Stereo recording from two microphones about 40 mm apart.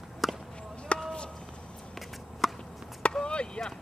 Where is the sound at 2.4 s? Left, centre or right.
Centre.